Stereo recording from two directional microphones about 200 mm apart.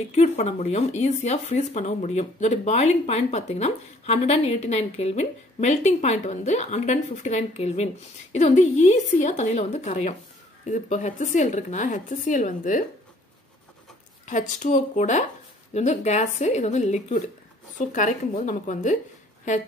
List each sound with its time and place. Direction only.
0.1 s speech: 35° left (ahead or behind)
14.2 s speech: 40° left (ahead or behind)